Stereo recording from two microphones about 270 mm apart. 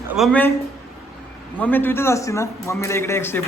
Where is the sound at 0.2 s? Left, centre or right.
Centre.